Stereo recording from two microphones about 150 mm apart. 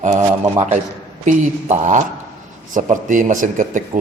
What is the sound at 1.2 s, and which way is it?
A man's voice, 50° right (ahead or behind).